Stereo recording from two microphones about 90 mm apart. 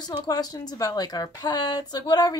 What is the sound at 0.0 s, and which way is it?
A woman's voice, 45° left (ahead or behind).